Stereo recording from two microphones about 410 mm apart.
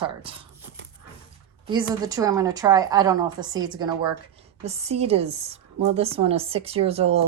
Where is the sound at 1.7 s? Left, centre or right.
Centre.